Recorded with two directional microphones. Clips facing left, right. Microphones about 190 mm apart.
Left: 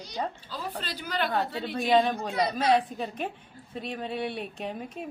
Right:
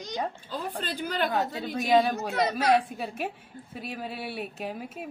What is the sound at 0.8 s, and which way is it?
Speech, 50° right (ahead or behind).